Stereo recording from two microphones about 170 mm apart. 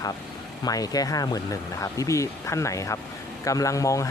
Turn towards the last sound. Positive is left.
turn(degrees=20)  # may be behind; listen again after turning